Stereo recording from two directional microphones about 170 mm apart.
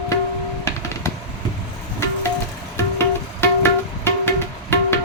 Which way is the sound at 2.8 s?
15° left (ahead or behind).